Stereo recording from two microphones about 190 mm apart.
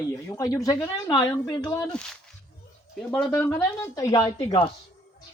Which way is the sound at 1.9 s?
5° left (ahead or behind).